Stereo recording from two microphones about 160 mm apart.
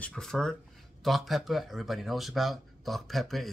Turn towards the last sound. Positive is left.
turn(degrees=0)  # may be behind; listen again after turning